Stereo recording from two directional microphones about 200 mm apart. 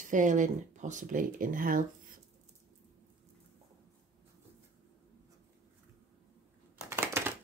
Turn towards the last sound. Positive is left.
turn(degrees=-10)  # may be behind; listen again after turning